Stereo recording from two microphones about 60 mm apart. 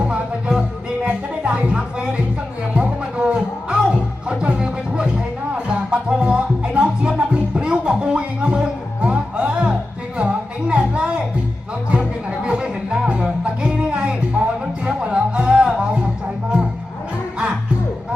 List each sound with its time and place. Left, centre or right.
0.0 s music: centre
17.3 s music: centre